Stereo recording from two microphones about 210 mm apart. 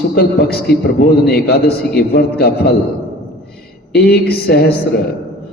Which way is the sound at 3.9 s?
50° left (ahead or behind).